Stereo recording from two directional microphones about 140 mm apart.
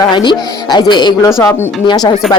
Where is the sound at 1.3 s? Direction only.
20° left (ahead or behind).